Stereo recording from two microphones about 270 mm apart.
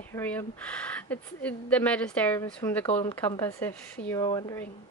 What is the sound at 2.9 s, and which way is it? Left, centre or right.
Speech, left.